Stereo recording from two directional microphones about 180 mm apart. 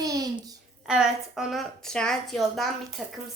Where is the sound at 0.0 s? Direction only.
20° right (ahead or behind).